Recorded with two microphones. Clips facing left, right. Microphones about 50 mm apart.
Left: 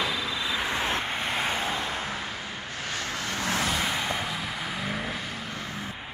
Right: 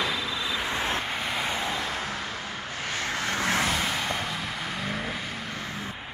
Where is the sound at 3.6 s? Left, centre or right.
Centre.